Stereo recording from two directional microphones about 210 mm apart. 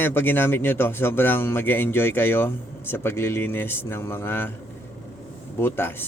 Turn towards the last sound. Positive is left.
turn(degrees=10)  # may be behind; listen again after turning